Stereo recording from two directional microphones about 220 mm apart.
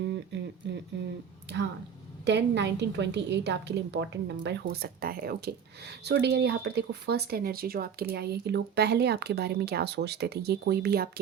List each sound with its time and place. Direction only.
1.5 s a woman's voice: 50° right (ahead or behind)